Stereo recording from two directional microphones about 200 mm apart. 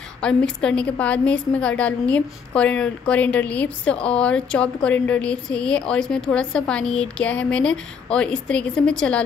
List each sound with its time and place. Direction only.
0.2 s a woman's voice: 5° left (ahead or behind)